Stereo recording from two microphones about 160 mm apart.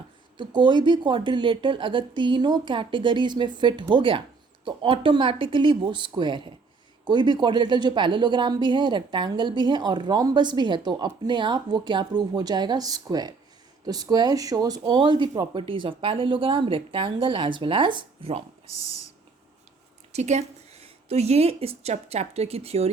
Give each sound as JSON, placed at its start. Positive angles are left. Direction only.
{"t": 0.3, "sound": "speech", "side_deg": -30}
{"t": 20.1, "sound": "a woman's voice", "side_deg": -45}